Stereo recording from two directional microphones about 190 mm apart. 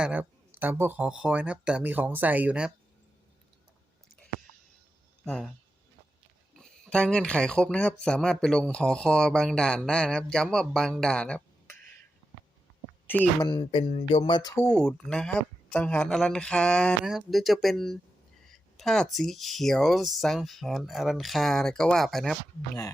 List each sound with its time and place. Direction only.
0.0 s speech: 10° right (ahead or behind)
5.2 s speech: 5° left (ahead or behind)
6.6 s speech: 5° left (ahead or behind)
13.1 s speech: 10° left (ahead or behind)
13.5 s speech: 25° left (ahead or behind)
14.5 s speech: 10° left (ahead or behind)